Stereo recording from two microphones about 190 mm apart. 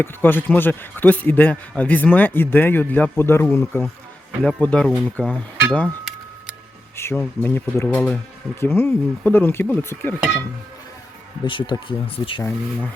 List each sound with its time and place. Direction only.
0.0 s speech: 10° left (ahead or behind)
5.7 s a sound: 5° left (ahead or behind)
6.9 s speech: 15° left (ahead or behind)
11.4 s speech: 25° left (ahead or behind)
12.4 s speech: 10° left (ahead or behind)